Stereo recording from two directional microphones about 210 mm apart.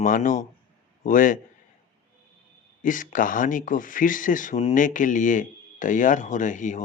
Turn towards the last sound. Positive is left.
turn(degrees=35)  # may be behind; listen again after turning